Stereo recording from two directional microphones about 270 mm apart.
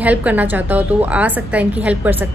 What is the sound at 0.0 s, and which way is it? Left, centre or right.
A woman's voice, centre.